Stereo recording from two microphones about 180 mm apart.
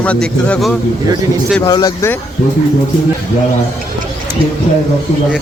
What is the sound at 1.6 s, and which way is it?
Speech, 20° left (ahead or behind).